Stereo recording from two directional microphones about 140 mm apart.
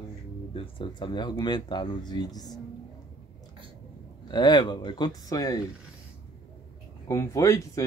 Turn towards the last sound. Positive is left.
turn(degrees=20)  # may be behind; listen again after turning